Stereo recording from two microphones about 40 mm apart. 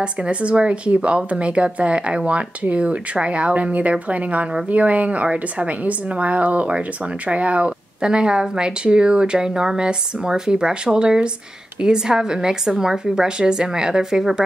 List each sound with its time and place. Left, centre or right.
0.0 s a woman's voice: right